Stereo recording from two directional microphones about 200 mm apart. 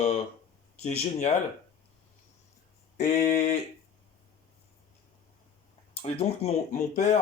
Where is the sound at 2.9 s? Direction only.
35° left (ahead or behind).